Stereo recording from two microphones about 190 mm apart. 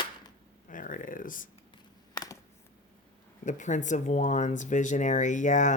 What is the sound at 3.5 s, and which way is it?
Speech, 40° left (ahead or behind).